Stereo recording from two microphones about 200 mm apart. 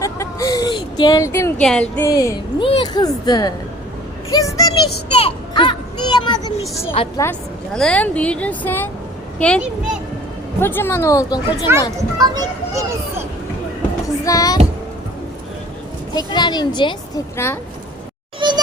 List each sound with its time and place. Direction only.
0.0 s a sound: 15° left (ahead or behind)
1.6 s speech: 5° left (ahead or behind)
2.0 s a woman's voice: 15° left (ahead or behind)
5.1 s a child's voice: 25° left (ahead or behind)
7.2 s a woman's voice: 5° left (ahead or behind)
10.6 s a woman's voice: 10° left (ahead or behind)
11.7 s a child's voice: 10° right (ahead or behind)
14.3 s speech: 20° left (ahead or behind)
16.1 s a woman's voice: 20° left (ahead or behind)
18.3 s a sound: 20° right (ahead or behind)